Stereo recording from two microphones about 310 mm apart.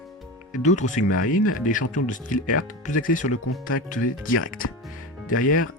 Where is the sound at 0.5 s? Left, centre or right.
Left.